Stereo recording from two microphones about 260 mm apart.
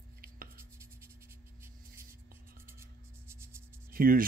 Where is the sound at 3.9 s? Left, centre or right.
Right.